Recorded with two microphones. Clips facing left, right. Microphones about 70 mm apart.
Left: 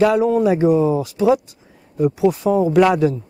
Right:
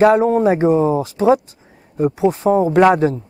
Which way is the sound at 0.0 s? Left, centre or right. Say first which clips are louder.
Right 3 dB; right.